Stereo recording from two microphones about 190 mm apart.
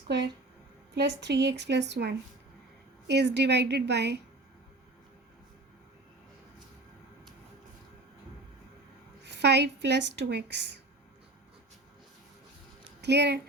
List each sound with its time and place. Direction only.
0.9 s speech: 65° right (ahead or behind)
9.2 s speech: 65° right (ahead or behind)
13.0 s speech: 65° right (ahead or behind)